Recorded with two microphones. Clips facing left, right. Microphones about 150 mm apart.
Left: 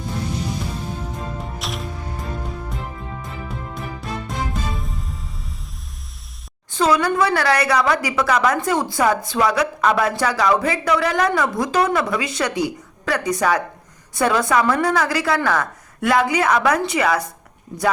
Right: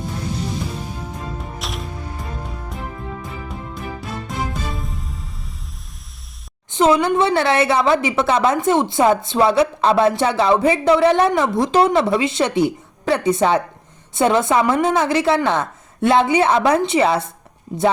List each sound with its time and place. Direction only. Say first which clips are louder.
1.5 s music: even; centre (ahead or behind)
4.3 s music: right 2 dB; centre (ahead or behind)
6.7 s a woman's voice: right 3 dB; 20° right (ahead or behind)